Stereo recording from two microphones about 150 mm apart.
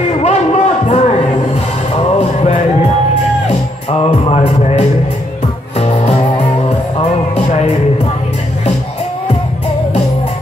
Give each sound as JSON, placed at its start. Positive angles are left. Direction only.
{"t": 0.2, "sound": "a sound", "side_deg": 50}
{"t": 2.1, "sound": "music", "side_deg": 45}
{"t": 4.1, "sound": "music", "side_deg": 50}
{"t": 6.2, "sound": "music", "side_deg": 25}
{"t": 7.3, "sound": "music", "side_deg": 50}